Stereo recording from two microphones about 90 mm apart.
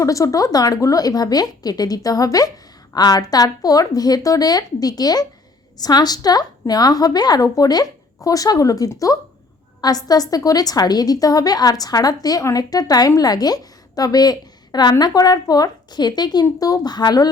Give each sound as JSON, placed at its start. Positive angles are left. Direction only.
{"t": 0.0, "sound": "a woman's voice", "side_deg": 40}